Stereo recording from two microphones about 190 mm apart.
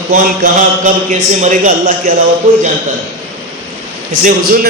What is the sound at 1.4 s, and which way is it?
A man's voice, 40° right (ahead or behind).